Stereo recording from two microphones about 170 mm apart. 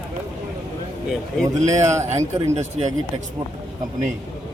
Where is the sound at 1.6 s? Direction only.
45° right (ahead or behind).